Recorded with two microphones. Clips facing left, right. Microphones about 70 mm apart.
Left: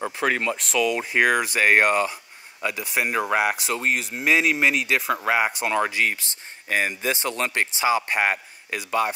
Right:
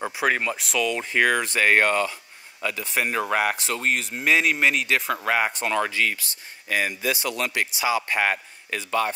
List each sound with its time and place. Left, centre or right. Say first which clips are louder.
0.0 s speech: even; centre; by 8.0 s left
8.1 s speech: left 1 dB; centre